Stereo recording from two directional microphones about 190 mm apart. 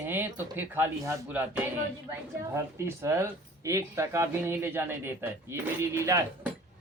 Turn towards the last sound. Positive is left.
turn(degrees=-15)  # may be behind; listen again after turning